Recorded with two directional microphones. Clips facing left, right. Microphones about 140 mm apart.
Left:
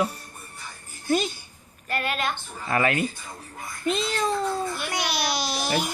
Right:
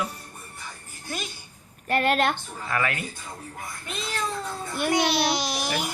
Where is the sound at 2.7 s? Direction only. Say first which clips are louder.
Left 5 dB; 25° left (ahead or behind).